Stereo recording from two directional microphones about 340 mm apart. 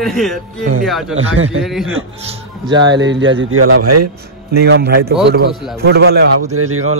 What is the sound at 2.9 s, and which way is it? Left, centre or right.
Speech, right.